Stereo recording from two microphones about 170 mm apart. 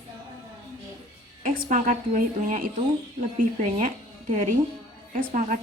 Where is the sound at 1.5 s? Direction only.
55° right (ahead or behind).